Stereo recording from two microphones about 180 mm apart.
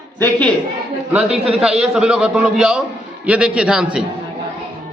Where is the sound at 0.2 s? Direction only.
10° left (ahead or behind).